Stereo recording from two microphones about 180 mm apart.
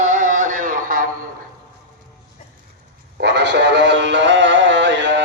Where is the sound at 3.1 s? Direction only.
70° right (ahead or behind).